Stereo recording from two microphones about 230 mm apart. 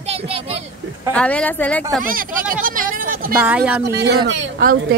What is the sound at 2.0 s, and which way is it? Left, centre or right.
Speech, right.